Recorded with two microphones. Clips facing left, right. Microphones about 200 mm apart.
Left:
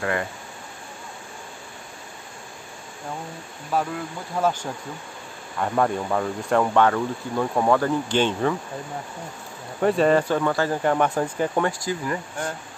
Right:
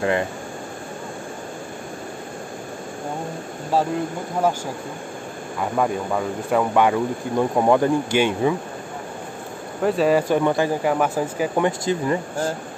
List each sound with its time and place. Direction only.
3.7 s speech: 30° right (ahead or behind)
5.6 s speech: 5° right (ahead or behind)
9.8 s speech: centre (ahead or behind); by 10.7 s 15° right (ahead or behind)
10.8 s speech: 5° right (ahead or behind)
11.6 s speech: 25° right (ahead or behind)